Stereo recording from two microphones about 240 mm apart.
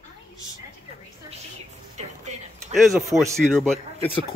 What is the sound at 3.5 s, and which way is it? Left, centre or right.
Speech, centre.